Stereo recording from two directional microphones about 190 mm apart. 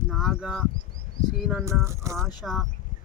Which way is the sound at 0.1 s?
Centre (ahead or behind).